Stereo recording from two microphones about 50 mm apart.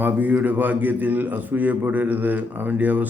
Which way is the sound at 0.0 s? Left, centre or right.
Right.